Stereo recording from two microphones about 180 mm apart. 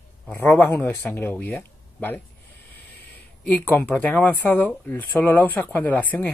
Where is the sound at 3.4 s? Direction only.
10° left (ahead or behind).